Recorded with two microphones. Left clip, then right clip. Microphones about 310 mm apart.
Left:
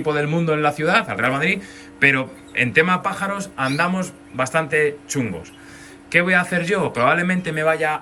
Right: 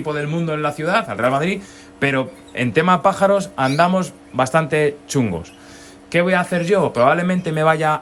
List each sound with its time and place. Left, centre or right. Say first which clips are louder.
0.0 s a man's voice: left 2 dB; centre